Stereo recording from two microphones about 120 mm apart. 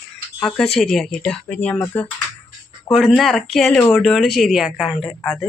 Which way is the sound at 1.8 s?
25° left (ahead or behind).